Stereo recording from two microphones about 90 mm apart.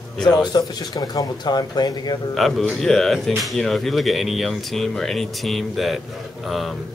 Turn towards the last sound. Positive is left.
turn(degrees=0)  # may be behind; listen again after turning